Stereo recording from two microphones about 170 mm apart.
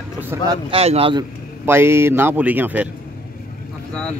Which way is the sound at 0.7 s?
35° right (ahead or behind).